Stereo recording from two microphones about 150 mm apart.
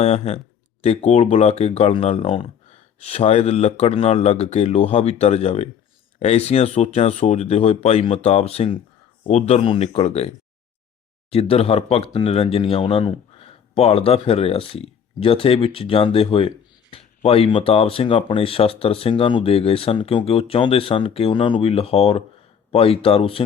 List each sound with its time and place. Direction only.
0.0 s speech: 45° left (ahead or behind)
11.3 s speech: 40° left (ahead or behind)